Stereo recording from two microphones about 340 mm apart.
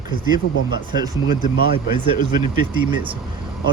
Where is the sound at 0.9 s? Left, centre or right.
Centre.